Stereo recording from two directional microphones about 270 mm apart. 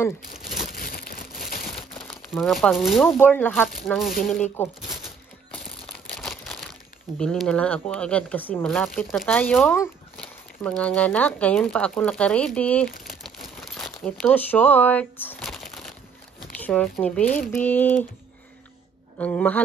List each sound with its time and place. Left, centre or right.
0.4 s crumpling: centre
0.7 s a sound: left
2.0 s speech: centre
6.1 s crumpling: centre
7.2 s speech: centre
13.0 s crumpling: centre
16.5 s speech: centre
19.1 s speech: centre